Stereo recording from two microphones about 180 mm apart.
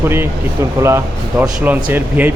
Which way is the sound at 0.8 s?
15° right (ahead or behind).